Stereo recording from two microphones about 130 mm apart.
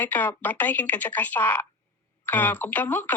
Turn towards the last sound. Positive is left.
turn(degrees=15)  # may be behind; listen again after turning